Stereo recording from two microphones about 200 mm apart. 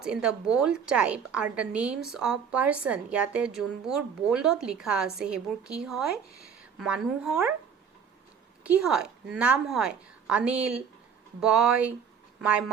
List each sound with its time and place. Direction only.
0.0 s a woman's voice: 5° right (ahead or behind)
8.6 s a woman's voice: 5° right (ahead or behind)